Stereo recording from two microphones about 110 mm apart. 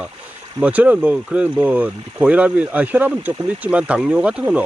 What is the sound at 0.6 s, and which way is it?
Speech, 15° right (ahead or behind).